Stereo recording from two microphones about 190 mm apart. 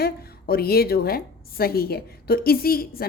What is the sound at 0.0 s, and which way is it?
A woman's voice, 55° left (ahead or behind).